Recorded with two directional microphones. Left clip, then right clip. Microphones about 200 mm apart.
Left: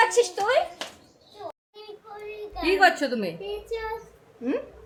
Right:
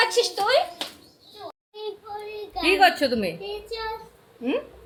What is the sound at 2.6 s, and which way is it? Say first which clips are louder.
Speech: right 2 dB; 10° right (ahead or behind).